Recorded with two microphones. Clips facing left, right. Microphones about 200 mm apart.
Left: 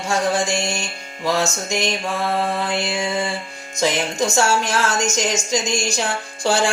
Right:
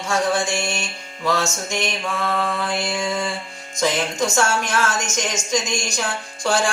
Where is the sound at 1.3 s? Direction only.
25° left (ahead or behind).